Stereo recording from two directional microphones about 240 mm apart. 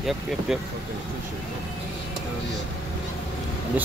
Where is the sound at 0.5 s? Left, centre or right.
Centre.